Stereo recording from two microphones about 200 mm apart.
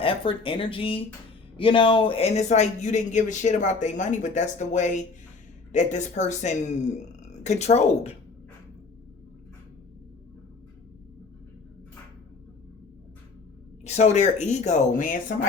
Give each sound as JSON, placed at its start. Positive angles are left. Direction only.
{"t": 0.0, "sound": "a man's voice", "side_deg": 25}
{"t": 13.8, "sound": "a man's voice", "side_deg": 35}